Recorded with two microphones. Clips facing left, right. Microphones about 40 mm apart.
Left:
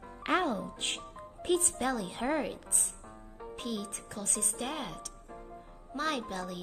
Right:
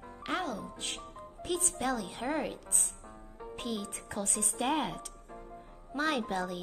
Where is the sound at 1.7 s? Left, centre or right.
Centre.